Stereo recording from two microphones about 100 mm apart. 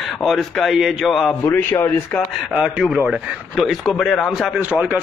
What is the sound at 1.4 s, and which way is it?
Speech, 25° left (ahead or behind).